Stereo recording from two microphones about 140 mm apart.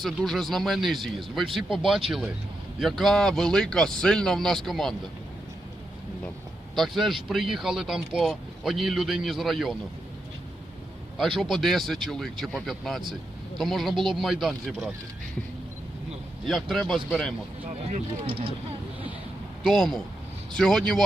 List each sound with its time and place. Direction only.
0.0 s speech: centre (ahead or behind)
6.7 s speech: centre (ahead or behind)
11.3 s speech: centre (ahead or behind)
16.5 s speech: centre (ahead or behind)
17.7 s speech: 45° right (ahead or behind)
19.6 s speech: centre (ahead or behind)